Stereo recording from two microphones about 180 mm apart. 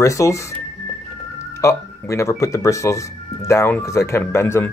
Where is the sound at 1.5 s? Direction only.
15° left (ahead or behind).